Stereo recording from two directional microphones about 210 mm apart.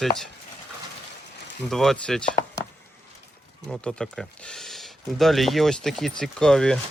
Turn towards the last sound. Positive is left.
turn(degrees=5)  # may be behind; listen again after turning